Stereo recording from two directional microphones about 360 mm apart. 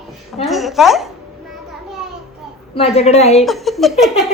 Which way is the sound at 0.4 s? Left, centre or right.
Centre.